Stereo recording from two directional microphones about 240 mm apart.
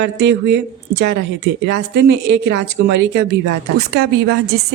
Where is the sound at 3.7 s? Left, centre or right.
Right.